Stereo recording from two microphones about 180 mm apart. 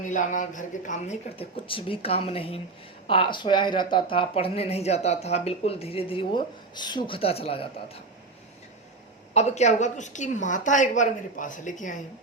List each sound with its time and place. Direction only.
0.0 s speech: 45° left (ahead or behind)
9.3 s a woman's voice: 40° left (ahead or behind)